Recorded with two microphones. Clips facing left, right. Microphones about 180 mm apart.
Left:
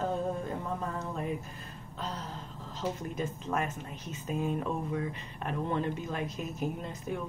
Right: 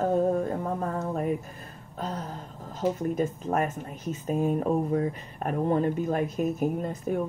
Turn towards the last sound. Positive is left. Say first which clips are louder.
# right 7 dB
turn(degrees=-45)  # may be behind; listen again after turning